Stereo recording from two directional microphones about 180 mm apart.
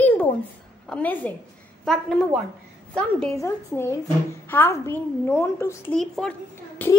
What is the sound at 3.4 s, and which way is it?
A woman's voice, 15° left (ahead or behind).